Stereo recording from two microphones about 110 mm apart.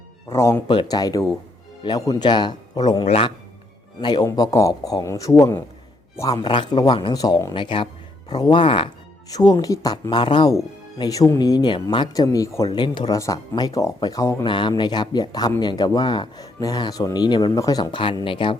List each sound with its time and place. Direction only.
0.3 s speech: 25° left (ahead or behind)
0.7 s speech: 40° left (ahead or behind)
3.0 s a man's voice: 55° left (ahead or behind)
4.0 s speech: 45° left (ahead or behind)
4.4 s speech: 35° left (ahead or behind)
6.4 s speech: 45° left (ahead or behind)
9.3 s speech: 40° left (ahead or behind)
12.7 s speech: 45° left (ahead or behind)
13.1 s speech: 30° left (ahead or behind)
14.4 s speech: 45° left (ahead or behind)
17.9 s speech: 50° left (ahead or behind)